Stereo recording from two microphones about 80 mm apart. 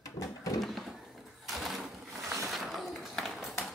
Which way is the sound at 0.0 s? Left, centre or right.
Left.